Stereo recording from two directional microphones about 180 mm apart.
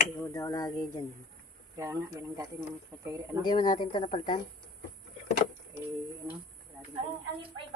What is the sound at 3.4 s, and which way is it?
Speech, 25° left (ahead or behind).